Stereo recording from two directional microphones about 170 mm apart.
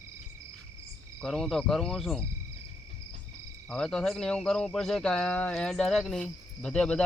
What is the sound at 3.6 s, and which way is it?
Speech, 5° left (ahead or behind).